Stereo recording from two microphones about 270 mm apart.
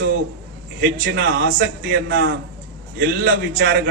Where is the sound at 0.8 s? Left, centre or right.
Right.